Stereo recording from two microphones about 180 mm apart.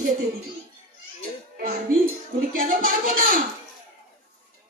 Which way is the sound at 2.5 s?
50° right (ahead or behind).